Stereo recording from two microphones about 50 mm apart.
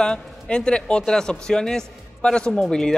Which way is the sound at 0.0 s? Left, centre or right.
Centre.